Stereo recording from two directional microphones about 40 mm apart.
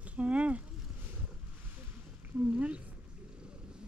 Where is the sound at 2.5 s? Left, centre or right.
Right.